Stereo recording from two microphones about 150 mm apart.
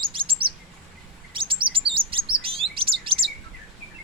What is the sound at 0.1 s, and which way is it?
Chirp, 35° right (ahead or behind).